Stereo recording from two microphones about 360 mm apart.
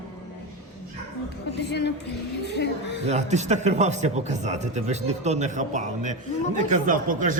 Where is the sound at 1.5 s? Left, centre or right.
Left.